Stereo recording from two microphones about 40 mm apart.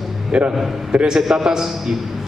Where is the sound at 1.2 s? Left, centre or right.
Centre.